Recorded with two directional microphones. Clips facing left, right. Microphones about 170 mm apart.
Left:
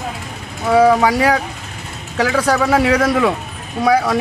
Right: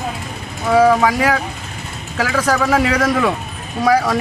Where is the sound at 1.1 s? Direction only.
30° left (ahead or behind).